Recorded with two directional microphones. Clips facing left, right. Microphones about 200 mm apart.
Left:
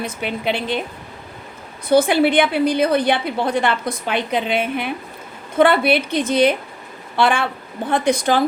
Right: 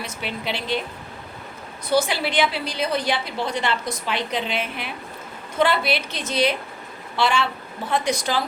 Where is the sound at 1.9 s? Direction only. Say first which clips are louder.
Left 7 dB; 55° left (ahead or behind).